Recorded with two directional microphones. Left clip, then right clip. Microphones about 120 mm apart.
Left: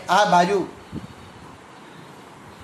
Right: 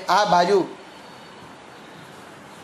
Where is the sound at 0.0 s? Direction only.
10° right (ahead or behind).